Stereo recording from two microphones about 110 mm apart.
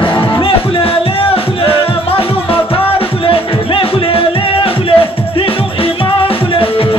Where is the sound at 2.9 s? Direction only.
55° left (ahead or behind).